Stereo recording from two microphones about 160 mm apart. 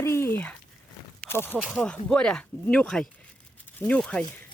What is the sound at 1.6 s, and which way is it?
Speech, 5° right (ahead or behind).